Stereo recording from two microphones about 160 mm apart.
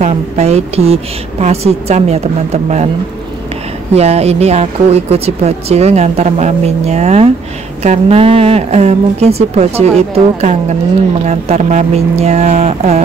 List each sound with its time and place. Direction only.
0.0 s speech: 40° right (ahead or behind)
3.9 s speech: 40° right (ahead or behind)